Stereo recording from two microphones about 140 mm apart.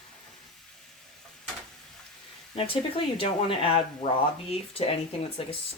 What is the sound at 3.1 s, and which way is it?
Speech, 40° left (ahead or behind).